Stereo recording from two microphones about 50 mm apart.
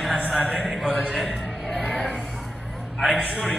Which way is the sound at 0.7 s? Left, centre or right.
Centre.